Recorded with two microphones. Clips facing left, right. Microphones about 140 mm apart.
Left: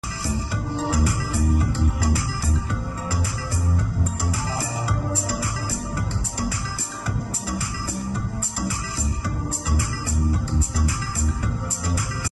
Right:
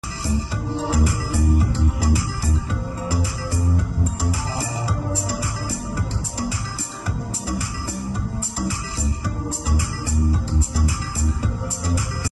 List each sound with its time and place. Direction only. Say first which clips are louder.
0.9 s music: right 2 dB; 20° right (ahead or behind)
4.8 s music: right 1 dB; 20° right (ahead or behind)